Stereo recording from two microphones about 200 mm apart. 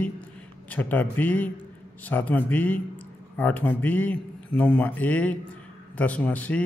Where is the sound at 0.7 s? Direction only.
10° left (ahead or behind).